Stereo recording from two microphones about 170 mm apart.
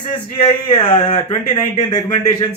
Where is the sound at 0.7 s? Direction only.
30° left (ahead or behind).